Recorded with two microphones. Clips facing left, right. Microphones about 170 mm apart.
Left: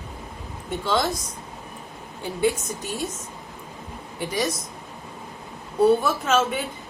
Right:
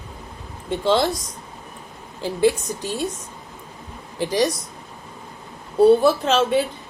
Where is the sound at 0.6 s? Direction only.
30° right (ahead or behind).